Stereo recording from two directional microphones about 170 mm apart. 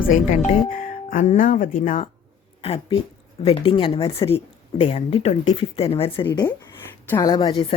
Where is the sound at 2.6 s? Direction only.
35° left (ahead or behind).